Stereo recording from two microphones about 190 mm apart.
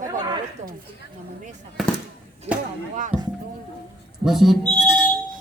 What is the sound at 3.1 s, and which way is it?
Speech, 5° right (ahead or behind).